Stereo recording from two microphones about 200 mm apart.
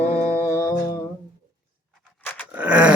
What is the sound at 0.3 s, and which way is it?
Music, 10° right (ahead or behind).